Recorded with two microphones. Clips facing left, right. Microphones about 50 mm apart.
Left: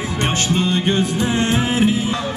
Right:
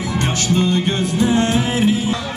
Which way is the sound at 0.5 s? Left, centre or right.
Left.